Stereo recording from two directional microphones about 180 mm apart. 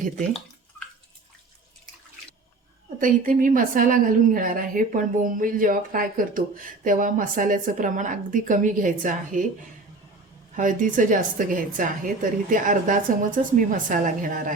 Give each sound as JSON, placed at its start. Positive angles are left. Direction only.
{"t": 3.0, "sound": "a woman's voice", "side_deg": -50}
{"t": 10.5, "sound": "a woman's voice", "side_deg": -45}